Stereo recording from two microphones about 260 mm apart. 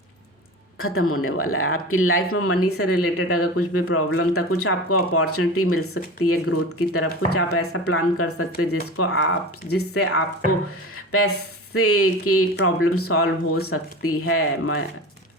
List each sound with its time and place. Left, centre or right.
0.8 s speech: left